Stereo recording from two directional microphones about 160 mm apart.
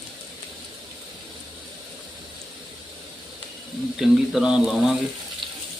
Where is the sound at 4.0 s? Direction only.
5° right (ahead or behind).